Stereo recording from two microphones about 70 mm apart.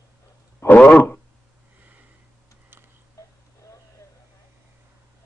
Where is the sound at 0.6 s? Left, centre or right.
Left.